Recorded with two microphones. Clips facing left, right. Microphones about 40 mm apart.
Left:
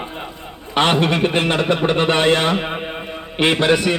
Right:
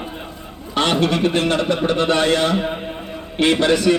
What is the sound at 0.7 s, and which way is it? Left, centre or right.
A man's voice, left.